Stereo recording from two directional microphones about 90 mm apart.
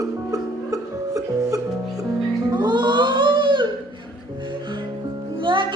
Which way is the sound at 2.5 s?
55° right (ahead or behind).